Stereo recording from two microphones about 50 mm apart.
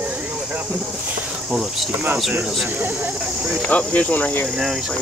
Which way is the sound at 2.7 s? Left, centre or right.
Right.